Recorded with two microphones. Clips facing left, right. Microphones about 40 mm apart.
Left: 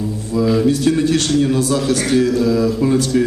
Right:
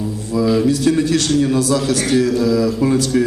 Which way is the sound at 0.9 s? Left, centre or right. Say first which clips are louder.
Even; left.